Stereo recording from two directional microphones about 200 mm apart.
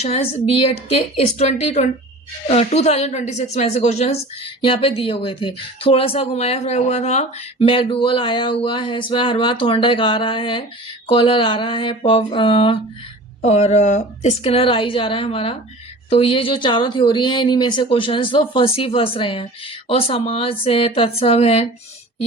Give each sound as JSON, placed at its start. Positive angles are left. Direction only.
{"t": 0.0, "sound": "a woman's voice", "side_deg": 30}